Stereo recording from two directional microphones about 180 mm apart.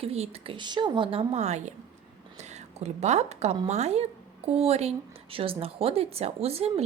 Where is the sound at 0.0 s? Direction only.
35° right (ahead or behind).